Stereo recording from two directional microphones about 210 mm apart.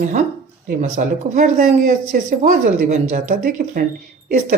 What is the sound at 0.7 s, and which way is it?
Speech, 40° right (ahead or behind).